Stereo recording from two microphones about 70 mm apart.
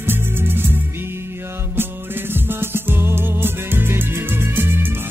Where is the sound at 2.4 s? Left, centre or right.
Right.